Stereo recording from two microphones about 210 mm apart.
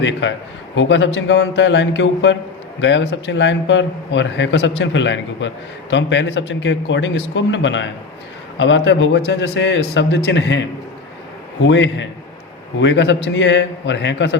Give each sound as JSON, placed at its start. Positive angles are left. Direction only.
{"t": 0.0, "sound": "a man's voice", "side_deg": 60}